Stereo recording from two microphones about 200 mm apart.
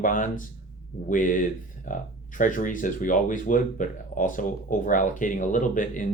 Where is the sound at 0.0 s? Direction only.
40° left (ahead or behind).